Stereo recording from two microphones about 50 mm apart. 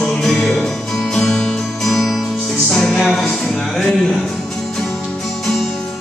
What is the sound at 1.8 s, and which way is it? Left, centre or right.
Music, centre.